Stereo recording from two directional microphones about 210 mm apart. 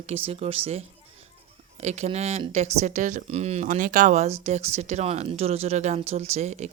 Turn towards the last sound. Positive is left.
turn(degrees=-35)  # may be behind; listen again after turning